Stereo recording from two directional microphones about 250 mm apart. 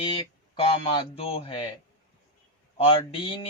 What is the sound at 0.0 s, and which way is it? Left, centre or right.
Speech, centre.